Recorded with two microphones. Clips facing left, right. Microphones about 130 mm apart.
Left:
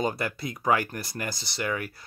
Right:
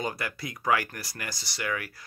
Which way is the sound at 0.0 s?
25° left (ahead or behind).